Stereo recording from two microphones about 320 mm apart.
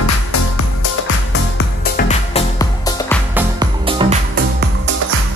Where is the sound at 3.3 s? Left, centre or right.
Centre.